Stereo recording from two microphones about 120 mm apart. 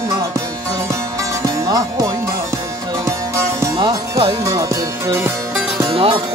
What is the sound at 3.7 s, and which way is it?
Music, 45° right (ahead or behind).